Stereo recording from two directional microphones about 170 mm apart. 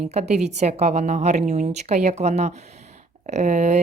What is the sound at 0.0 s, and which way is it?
A woman's voice, 40° right (ahead or behind).